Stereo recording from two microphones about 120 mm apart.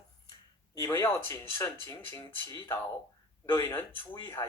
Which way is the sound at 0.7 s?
25° left (ahead or behind).